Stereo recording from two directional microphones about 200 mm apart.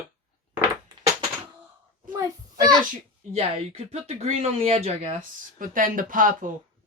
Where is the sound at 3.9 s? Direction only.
35° right (ahead or behind).